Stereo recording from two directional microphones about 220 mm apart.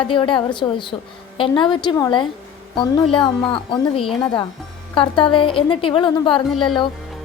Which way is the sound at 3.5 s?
20° left (ahead or behind).